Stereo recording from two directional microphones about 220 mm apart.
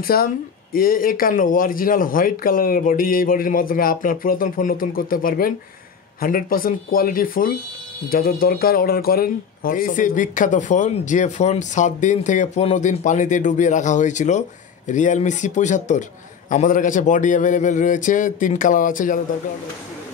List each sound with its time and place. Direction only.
0.0 s speech: 45° left (ahead or behind)